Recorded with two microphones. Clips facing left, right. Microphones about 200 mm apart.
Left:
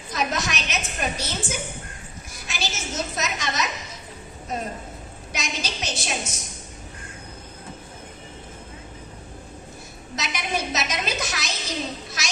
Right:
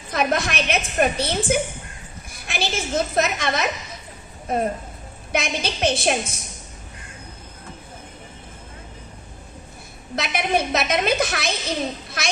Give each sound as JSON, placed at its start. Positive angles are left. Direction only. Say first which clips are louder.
{"t": 0.1, "sound": "a woman's voice", "louder": "right 5 dB", "side_deg": -55}
{"t": 10.2, "sound": "a woman's voice", "louder": "right 6 dB", "side_deg": -55}